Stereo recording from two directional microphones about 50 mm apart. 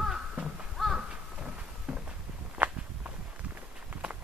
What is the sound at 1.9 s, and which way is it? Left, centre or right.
Walk, centre.